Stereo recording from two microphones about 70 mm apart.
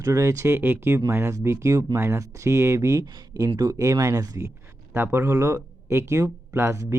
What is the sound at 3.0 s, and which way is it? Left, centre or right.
Speech, right.